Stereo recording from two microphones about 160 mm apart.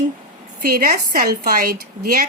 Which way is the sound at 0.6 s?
60° right (ahead or behind).